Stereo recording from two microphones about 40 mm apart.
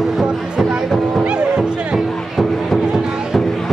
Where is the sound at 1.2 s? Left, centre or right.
Right.